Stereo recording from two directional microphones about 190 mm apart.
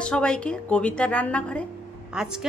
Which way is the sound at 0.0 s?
5° left (ahead or behind).